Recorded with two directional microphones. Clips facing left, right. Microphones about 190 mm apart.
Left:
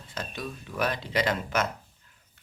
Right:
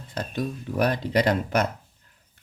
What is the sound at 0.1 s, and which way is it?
Speech, 55° right (ahead or behind).